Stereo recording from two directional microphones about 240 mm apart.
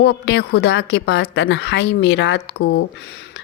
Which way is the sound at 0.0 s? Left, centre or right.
Left.